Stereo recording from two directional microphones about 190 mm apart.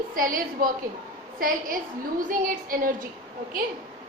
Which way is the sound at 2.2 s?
45° right (ahead or behind).